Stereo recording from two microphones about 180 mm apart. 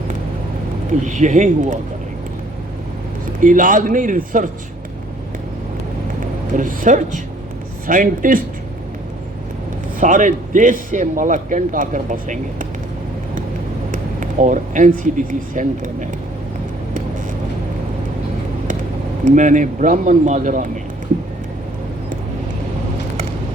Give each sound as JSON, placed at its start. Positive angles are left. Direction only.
{"t": 1.0, "sound": "a man's voice", "side_deg": -40}
{"t": 3.4, "sound": "a man's voice", "side_deg": -45}
{"t": 6.6, "sound": "a man's voice", "side_deg": -45}
{"t": 10.0, "sound": "a man's voice", "side_deg": -45}
{"t": 13.9, "sound": "speech", "side_deg": -45}
{"t": 19.2, "sound": "a man's voice", "side_deg": -45}